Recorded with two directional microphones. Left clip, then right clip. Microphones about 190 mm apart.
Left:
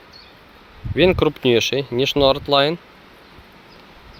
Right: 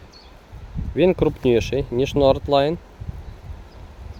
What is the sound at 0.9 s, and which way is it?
Speech, 5° right (ahead or behind).